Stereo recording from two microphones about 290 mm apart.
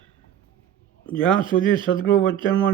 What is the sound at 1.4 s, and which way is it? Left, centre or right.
A man's voice, centre.